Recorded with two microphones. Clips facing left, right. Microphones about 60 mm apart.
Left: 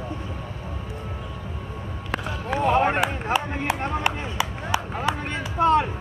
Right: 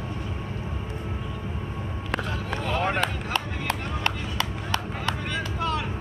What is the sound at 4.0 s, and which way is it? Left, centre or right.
Run, centre.